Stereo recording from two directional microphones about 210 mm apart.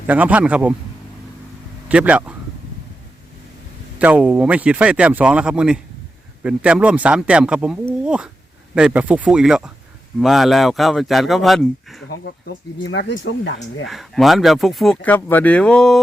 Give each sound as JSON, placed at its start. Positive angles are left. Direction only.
{"t": 0.1, "sound": "a man's voice", "side_deg": -5}
{"t": 1.9, "sound": "a man's voice", "side_deg": -5}
{"t": 3.9, "sound": "speech", "side_deg": -5}
{"t": 12.8, "sound": "speech", "side_deg": 60}
{"t": 13.8, "sound": "speech", "side_deg": 0}